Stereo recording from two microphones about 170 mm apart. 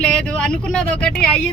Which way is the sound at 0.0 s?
5° left (ahead or behind).